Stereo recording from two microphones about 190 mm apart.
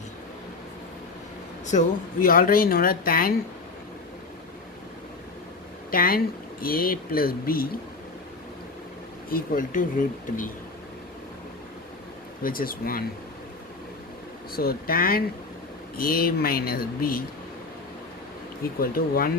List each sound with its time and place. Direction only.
2.2 s speech: 50° left (ahead or behind)
5.9 s speech: 50° left (ahead or behind)
9.3 s speech: 45° left (ahead or behind)
12.4 s speech: 50° left (ahead or behind)
14.5 s speech: 50° left (ahead or behind)
18.8 s speech: 50° left (ahead or behind)